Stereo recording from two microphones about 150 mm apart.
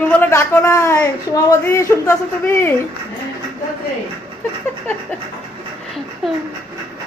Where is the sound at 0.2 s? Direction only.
15° left (ahead or behind).